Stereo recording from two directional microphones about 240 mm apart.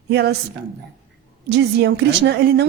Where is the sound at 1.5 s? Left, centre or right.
Right.